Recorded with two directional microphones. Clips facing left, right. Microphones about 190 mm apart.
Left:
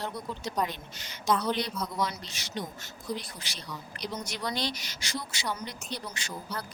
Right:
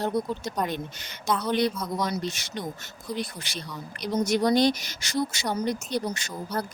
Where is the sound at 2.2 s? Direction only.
50° right (ahead or behind).